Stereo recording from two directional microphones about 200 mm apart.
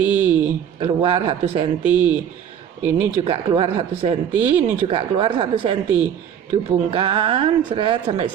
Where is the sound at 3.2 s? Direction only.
25° right (ahead or behind).